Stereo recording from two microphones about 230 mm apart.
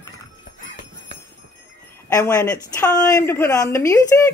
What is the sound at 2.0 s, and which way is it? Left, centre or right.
Speech, centre.